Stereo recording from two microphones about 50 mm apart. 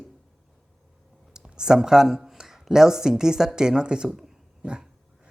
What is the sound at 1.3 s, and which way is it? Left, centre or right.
Speech, centre.